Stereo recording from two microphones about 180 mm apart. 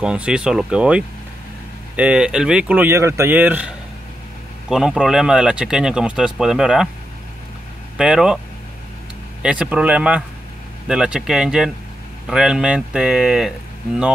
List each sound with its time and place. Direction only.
0.0 s speech: 5° right (ahead or behind)
8.0 s speech: 5° right (ahead or behind)
9.4 s speech: 5° right (ahead or behind)